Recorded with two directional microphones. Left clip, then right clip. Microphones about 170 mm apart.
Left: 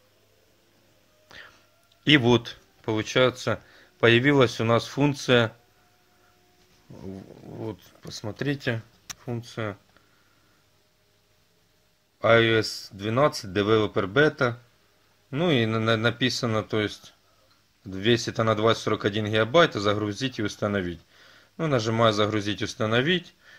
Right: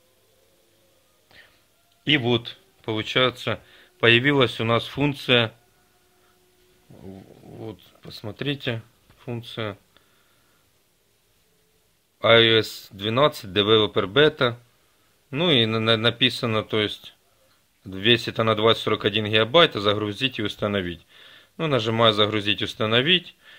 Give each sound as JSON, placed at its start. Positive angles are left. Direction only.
{"t": 1.3, "sound": "music", "side_deg": 35}
{"t": 2.0, "sound": "speech", "side_deg": 25}
{"t": 2.8, "sound": "speech", "side_deg": 5}
{"t": 6.9, "sound": "speech", "side_deg": 30}
{"t": 12.2, "sound": "speech", "side_deg": -5}